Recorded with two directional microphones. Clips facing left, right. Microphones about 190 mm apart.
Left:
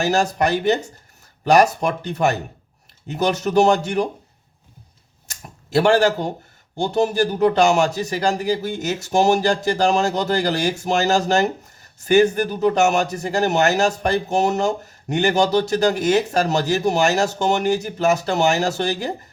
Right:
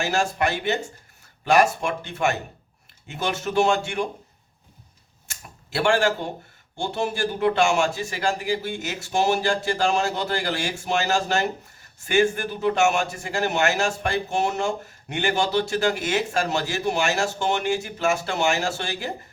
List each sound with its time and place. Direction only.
0.0 s speech: 40° left (ahead or behind)
5.3 s a sound: 40° left (ahead or behind)
6.7 s speech: 40° left (ahead or behind)